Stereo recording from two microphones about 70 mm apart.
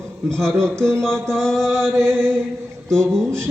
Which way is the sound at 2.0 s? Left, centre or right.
Right.